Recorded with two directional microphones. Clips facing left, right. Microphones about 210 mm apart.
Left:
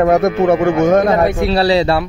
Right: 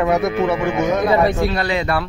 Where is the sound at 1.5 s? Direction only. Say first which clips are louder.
Left 7 dB; 35° left (ahead or behind).